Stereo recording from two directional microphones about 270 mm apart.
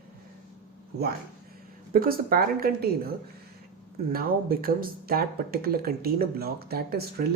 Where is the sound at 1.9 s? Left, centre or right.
Right.